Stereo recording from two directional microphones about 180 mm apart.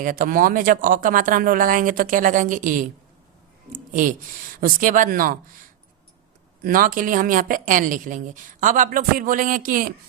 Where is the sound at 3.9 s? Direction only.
50° right (ahead or behind).